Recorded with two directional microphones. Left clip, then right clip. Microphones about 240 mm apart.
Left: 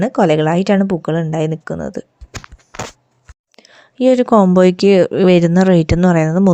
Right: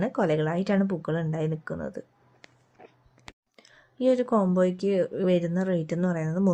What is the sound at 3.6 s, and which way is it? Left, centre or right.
Speech, left.